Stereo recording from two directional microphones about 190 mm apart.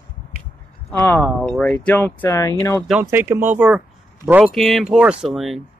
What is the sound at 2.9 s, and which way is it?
Speech, 10° right (ahead or behind).